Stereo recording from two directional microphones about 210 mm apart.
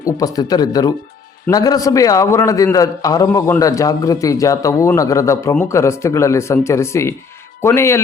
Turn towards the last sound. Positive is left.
turn(degrees=10)  # may be behind; listen again after turning